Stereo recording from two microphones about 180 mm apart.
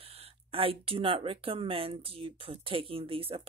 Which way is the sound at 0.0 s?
30° right (ahead or behind).